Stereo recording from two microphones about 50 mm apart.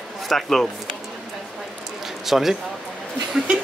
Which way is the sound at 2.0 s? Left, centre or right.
Centre.